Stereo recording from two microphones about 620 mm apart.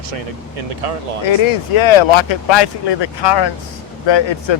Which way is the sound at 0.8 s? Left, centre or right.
Right.